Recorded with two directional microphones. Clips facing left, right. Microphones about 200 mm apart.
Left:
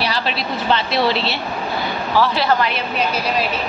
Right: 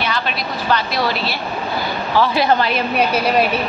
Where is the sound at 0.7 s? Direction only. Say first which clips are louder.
Left 1 dB; 25° left (ahead or behind).